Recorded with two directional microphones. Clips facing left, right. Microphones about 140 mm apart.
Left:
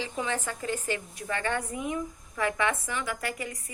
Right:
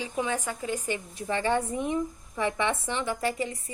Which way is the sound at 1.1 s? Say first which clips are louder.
Right 7 dB; 25° right (ahead or behind).